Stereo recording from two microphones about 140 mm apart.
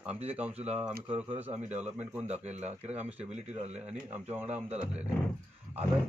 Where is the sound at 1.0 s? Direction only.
10° right (ahead or behind).